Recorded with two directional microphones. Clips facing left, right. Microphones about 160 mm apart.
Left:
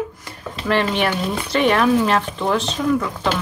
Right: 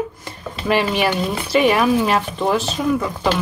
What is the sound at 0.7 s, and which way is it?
Speech, 5° right (ahead or behind).